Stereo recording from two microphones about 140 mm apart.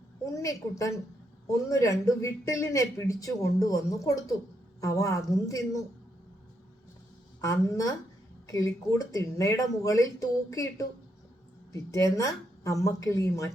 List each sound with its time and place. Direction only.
0.3 s speech: 20° left (ahead or behind)
7.4 s speech: 25° left (ahead or behind)